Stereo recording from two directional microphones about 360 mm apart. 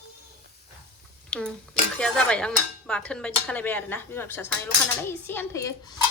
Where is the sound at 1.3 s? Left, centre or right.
Centre.